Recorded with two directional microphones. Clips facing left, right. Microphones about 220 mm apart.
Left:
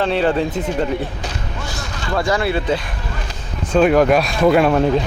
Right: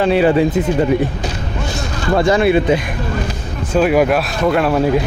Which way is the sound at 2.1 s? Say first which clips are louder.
Right 6 dB; 25° right (ahead or behind).